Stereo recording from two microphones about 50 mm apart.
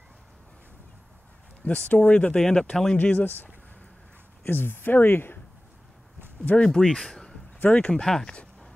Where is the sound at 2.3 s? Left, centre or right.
Centre.